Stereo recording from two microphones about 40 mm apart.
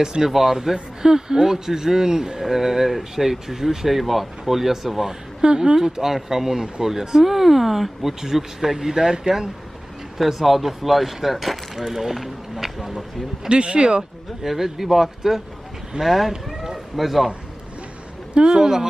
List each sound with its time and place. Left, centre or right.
0.0 s a man's voice: centre
5.4 s a man's voice: right
10.2 s speech: centre
13.5 s speech: right
14.4 s speech: centre
16.5 s cat: centre
18.4 s a man's voice: centre